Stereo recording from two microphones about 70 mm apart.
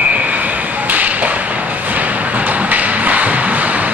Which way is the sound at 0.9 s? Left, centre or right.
Right.